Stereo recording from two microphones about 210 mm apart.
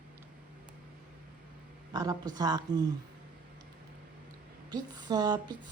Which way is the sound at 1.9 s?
20° right (ahead or behind).